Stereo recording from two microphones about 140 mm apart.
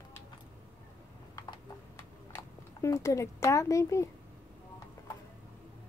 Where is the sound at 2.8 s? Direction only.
20° left (ahead or behind).